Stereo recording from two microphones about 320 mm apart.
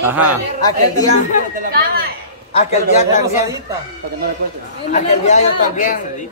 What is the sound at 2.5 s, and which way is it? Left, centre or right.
Speech, centre.